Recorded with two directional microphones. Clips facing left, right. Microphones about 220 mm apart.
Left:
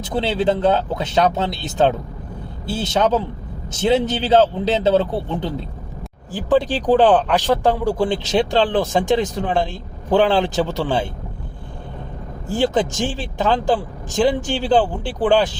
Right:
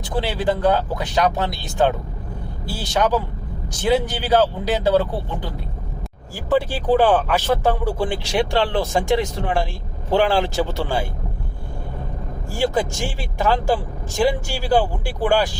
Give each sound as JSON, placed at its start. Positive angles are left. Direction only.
{"t": 0.0, "sound": "a man's voice", "side_deg": 20}
{"t": 12.5, "sound": "speech", "side_deg": 20}
{"t": 14.1, "sound": "speech", "side_deg": 20}